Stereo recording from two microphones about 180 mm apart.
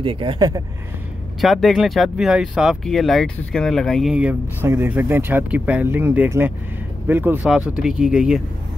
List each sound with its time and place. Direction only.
0.0 s speech: 30° right (ahead or behind)
1.4 s speech: centre (ahead or behind)